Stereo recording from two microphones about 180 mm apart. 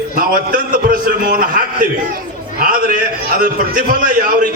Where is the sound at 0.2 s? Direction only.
55° right (ahead or behind).